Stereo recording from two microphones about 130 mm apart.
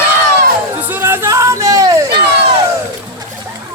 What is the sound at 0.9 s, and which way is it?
Music, 15° right (ahead or behind).